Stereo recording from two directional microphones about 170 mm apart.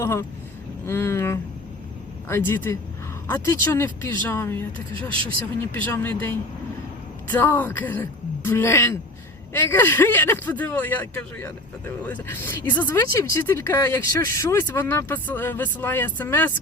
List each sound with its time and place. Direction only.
0.0 s speech: 15° left (ahead or behind)
5.9 s speech: 10° left (ahead or behind)